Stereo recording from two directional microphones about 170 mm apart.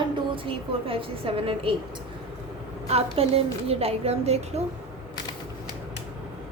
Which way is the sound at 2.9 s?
35° right (ahead or behind).